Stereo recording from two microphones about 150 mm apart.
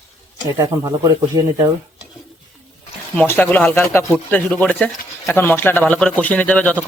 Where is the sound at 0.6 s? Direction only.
20° right (ahead or behind).